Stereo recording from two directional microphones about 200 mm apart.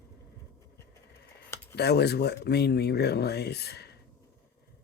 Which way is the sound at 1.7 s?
55° left (ahead or behind).